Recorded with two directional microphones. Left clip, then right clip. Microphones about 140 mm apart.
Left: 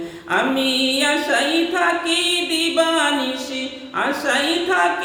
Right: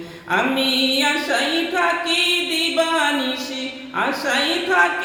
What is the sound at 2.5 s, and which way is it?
A woman's voice, 10° left (ahead or behind).